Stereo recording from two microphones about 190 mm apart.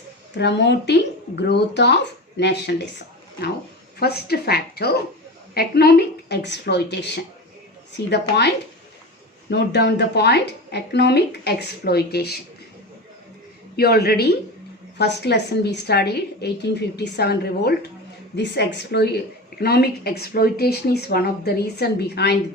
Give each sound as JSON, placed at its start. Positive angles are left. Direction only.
{"t": 0.3, "sound": "a woman's voice", "side_deg": 65}
{"t": 4.0, "sound": "a woman's voice", "side_deg": 55}
{"t": 8.1, "sound": "a woman's voice", "side_deg": 65}
{"t": 13.7, "sound": "a woman's voice", "side_deg": 55}